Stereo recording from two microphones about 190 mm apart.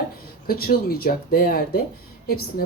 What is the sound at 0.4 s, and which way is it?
A woman's voice, 55° left (ahead or behind).